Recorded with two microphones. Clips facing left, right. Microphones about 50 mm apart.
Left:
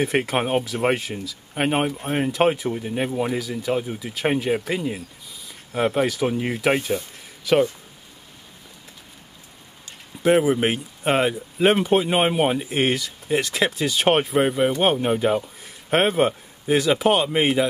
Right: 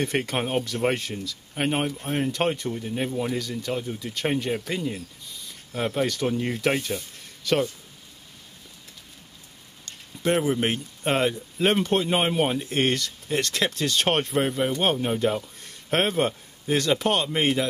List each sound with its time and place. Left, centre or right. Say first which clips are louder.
0.0 s speech: left 4 dB; centre
0.4 s speech: left 3 dB; centre
2.7 s speech: left 3 dB; centre
9.8 s speech: left 6 dB; centre